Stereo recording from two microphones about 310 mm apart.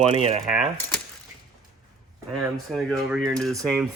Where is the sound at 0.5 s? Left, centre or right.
Centre.